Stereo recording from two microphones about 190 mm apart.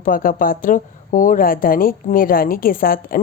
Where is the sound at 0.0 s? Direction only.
45° left (ahead or behind).